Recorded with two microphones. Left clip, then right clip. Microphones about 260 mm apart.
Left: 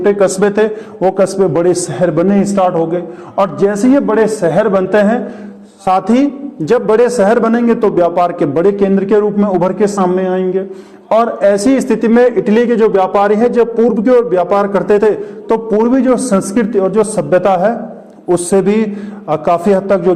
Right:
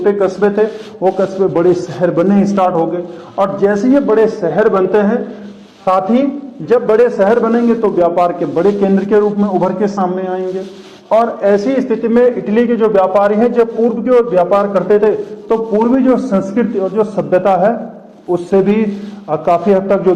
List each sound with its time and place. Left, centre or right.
0.0 s a man's voice: left